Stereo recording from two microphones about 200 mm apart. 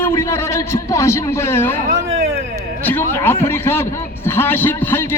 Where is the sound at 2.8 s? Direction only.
10° left (ahead or behind).